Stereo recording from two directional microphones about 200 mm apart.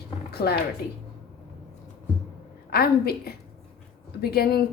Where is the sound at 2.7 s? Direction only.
50° left (ahead or behind).